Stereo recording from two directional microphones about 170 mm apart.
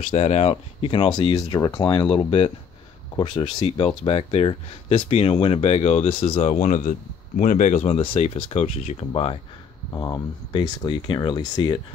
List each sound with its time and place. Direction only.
0.0 s speech: 40° left (ahead or behind)
1.5 s speech: 20° left (ahead or behind)